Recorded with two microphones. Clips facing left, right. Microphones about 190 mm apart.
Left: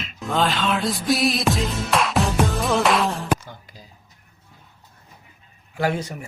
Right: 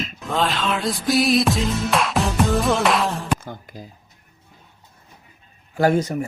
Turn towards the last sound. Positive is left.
turn(degrees=-45)  # may be behind; listen again after turning